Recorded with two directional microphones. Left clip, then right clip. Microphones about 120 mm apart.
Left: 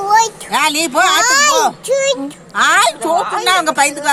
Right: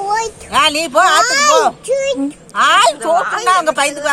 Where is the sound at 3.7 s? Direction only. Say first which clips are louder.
Left 1 dB; 15° right (ahead or behind).